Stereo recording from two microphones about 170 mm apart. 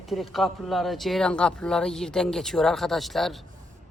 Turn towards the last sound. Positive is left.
turn(degrees=0)  # may be behind; listen again after turning